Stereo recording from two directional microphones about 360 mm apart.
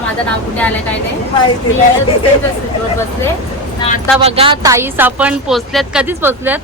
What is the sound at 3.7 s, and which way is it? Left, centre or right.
Speech, centre.